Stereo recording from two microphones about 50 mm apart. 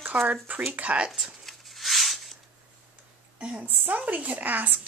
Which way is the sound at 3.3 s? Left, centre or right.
Right.